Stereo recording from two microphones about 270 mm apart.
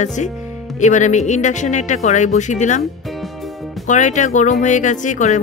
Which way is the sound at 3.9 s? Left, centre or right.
Left.